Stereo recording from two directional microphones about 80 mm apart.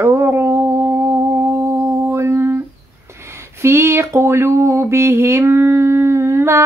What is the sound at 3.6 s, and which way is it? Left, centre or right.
Speech, right.